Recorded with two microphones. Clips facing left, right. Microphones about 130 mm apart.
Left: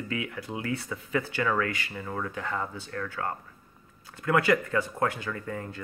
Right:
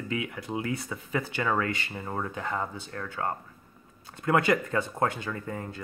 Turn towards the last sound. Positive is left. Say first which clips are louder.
# even
turn(degrees=-25)  # may be behind; listen again after turning